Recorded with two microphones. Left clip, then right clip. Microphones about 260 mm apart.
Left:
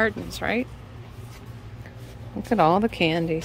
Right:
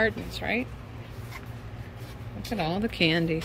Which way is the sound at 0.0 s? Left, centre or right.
Centre.